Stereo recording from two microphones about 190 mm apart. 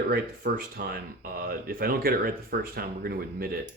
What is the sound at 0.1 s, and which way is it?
Speech, 50° right (ahead or behind).